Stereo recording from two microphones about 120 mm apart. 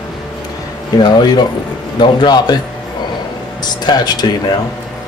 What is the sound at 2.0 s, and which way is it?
Speech, 35° left (ahead or behind).